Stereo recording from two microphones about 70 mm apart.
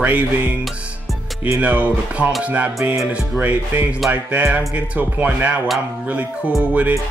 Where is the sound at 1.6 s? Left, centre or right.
Right.